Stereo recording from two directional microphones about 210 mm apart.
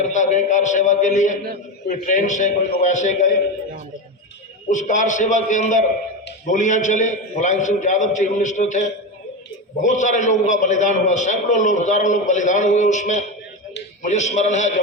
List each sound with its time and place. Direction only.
0.1 s a man's voice: 35° left (ahead or behind)
4.7 s a man's voice: 35° left (ahead or behind)